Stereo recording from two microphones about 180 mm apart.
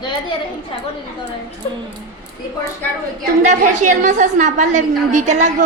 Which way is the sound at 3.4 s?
40° right (ahead or behind).